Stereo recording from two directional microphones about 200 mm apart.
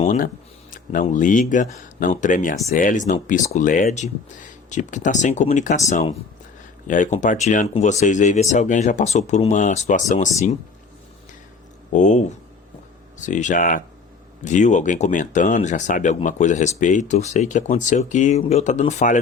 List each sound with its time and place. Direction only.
0.0 s speech: 35° left (ahead or behind)
0.7 s a sound: 40° left (ahead or behind)
1.1 s speech: 40° left (ahead or behind)
11.9 s speech: 35° left (ahead or behind)